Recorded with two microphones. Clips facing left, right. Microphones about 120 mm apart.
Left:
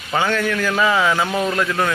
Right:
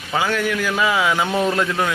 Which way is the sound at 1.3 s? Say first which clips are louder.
Right 1 dB; 25° right (ahead or behind).